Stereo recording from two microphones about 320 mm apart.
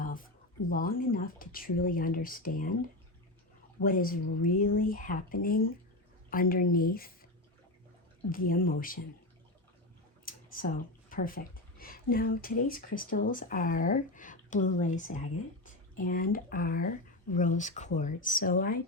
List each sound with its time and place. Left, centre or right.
0.0 s a sound: left
0.7 s speech: left
3.8 s speech: left
8.3 s speech: left
10.2 s a sound: left
11.1 s speech: left